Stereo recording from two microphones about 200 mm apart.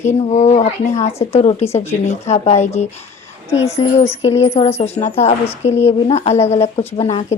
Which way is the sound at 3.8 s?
25° left (ahead or behind).